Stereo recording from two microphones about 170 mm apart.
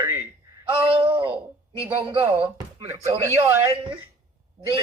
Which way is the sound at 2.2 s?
10° right (ahead or behind).